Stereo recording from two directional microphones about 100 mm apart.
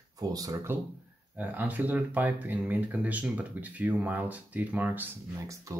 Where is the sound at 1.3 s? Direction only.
15° right (ahead or behind).